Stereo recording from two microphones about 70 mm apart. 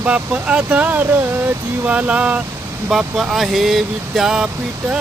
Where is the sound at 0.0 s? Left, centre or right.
Centre.